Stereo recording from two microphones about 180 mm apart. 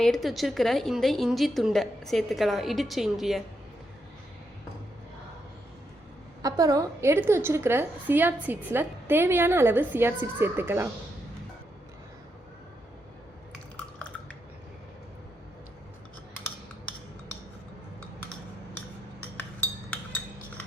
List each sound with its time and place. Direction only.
0.0 s a woman's voice: centre (ahead or behind)
6.4 s a woman's voice: 20° right (ahead or behind)
13.7 s a sound: 5° left (ahead or behind)